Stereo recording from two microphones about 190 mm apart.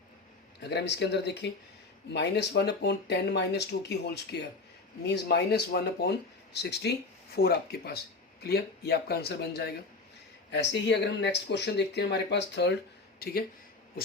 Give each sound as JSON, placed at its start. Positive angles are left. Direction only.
{"t": 0.6, "sound": "speech", "side_deg": 60}
{"t": 13.1, "sound": "speech", "side_deg": 55}